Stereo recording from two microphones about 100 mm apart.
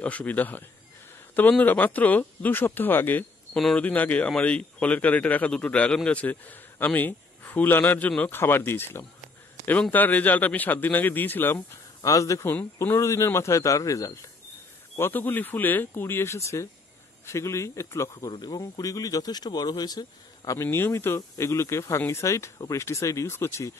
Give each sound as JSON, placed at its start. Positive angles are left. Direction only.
{"t": 0.0, "sound": "speech", "side_deg": 15}
{"t": 3.5, "sound": "speech", "side_deg": 5}
{"t": 3.8, "sound": "a man's voice", "side_deg": 15}
{"t": 12.0, "sound": "speech", "side_deg": 35}
{"t": 15.0, "sound": "speech", "side_deg": 20}
{"t": 18.3, "sound": "speech", "side_deg": 45}
{"t": 20.5, "sound": "speech", "side_deg": 25}